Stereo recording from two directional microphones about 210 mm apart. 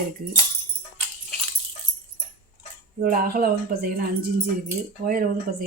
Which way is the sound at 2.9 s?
45° right (ahead or behind).